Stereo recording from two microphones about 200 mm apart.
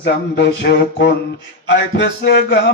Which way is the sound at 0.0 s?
55° left (ahead or behind).